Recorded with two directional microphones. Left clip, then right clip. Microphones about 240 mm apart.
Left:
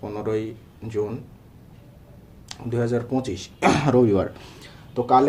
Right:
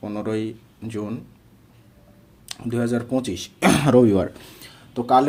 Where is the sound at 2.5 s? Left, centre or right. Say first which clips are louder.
Even; right.